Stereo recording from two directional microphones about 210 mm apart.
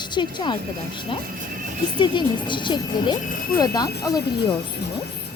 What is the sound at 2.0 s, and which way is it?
Speech, 20° left (ahead or behind).